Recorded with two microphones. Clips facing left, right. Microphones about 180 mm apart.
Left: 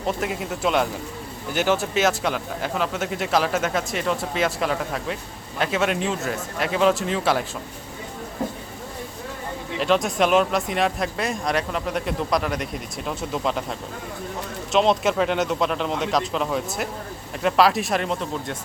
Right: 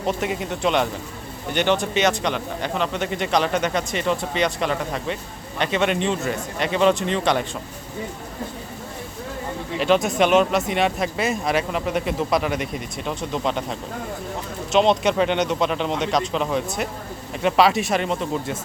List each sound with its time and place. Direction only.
0.0 s speech: centre (ahead or behind)
9.7 s speech: centre (ahead or behind)